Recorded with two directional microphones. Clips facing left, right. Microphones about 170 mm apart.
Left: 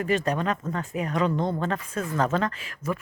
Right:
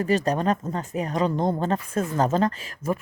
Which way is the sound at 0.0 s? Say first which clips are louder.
Right 3 dB; 35° right (ahead or behind).